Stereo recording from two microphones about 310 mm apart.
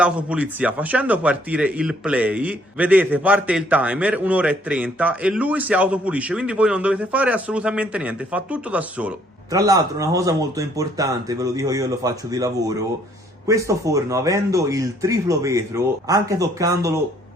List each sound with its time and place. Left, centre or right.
0.0 s a man's voice: centre